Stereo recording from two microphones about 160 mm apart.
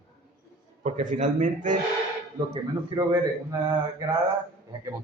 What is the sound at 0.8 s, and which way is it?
Speech, 50° right (ahead or behind).